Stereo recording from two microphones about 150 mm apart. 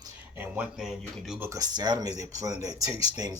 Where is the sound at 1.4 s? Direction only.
20° right (ahead or behind).